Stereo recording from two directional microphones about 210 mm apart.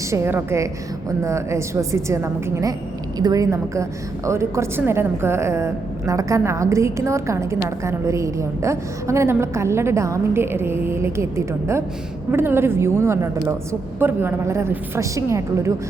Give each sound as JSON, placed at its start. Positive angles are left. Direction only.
{"t": 0.1, "sound": "a woman's voice", "side_deg": -10}